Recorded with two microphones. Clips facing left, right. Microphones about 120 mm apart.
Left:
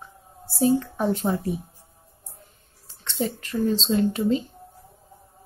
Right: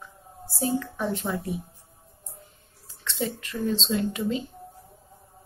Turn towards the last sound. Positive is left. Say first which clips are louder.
# left 5 dB
turn(degrees=35)  # may be behind; listen again after turning